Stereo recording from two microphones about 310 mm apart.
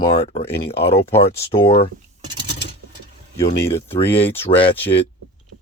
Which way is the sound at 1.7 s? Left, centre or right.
Centre.